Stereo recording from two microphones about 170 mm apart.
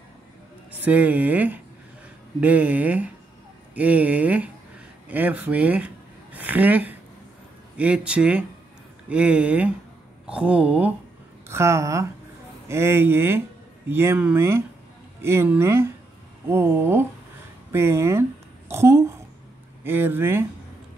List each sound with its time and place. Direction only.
0.7 s a woman's voice: 10° right (ahead or behind)